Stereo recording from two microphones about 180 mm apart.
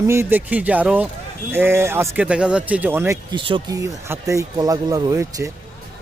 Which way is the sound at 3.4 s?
25° right (ahead or behind).